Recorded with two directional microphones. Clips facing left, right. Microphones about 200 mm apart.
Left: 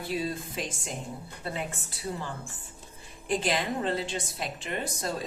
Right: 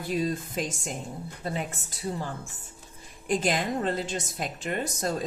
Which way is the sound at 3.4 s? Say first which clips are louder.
Right 2 dB; 45° right (ahead or behind).